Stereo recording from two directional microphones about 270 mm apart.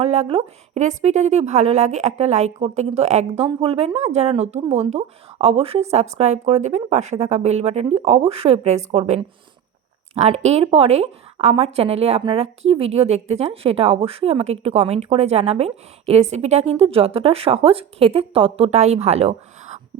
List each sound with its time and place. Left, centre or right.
0.0 s a woman's voice: right